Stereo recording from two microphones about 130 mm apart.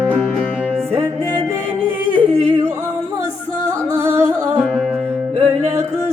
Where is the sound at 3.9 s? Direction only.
20° right (ahead or behind).